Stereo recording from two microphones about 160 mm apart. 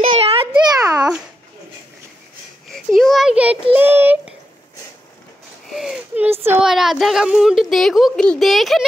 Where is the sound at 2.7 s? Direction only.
Centre (ahead or behind).